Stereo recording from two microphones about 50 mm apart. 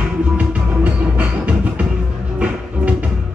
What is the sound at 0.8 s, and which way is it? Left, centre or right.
Music, right.